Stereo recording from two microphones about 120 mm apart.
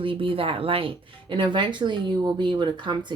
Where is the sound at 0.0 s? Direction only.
50° right (ahead or behind).